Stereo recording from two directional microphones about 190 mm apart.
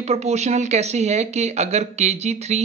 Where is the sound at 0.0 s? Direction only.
35° right (ahead or behind).